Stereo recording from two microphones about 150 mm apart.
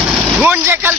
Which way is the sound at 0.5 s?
15° right (ahead or behind).